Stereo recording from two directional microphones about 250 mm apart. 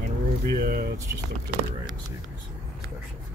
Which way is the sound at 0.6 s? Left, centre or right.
Right.